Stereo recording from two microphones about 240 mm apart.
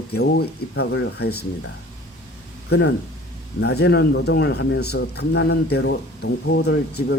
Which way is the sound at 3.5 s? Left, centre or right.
Left.